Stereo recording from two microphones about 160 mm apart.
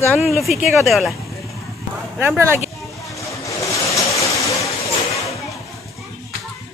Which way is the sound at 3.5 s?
20° left (ahead or behind).